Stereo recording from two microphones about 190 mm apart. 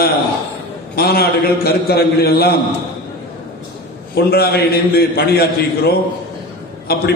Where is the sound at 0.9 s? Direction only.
55° left (ahead or behind).